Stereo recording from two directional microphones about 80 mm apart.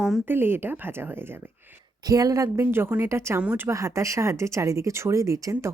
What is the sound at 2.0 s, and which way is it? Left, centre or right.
Speech, right.